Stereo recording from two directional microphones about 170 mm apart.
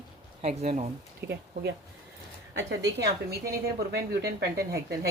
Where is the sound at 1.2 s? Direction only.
80° right.